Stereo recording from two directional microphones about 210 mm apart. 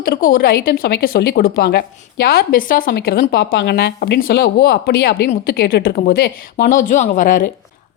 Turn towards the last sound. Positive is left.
turn(degrees=40)  # may be behind; listen again after turning